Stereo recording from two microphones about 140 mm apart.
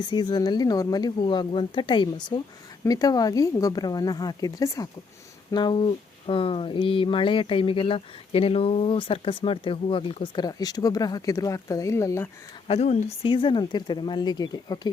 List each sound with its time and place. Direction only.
0.0 s speech: 30° left (ahead or behind)
12.6 s speech: 50° left (ahead or behind)
13.2 s speech: 35° left (ahead or behind)